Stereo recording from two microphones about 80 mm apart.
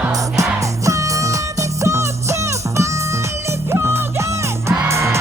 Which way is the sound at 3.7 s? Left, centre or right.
Right.